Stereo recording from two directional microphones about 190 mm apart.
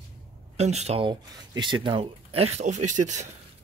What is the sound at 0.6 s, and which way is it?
Speech, 35° right (ahead or behind).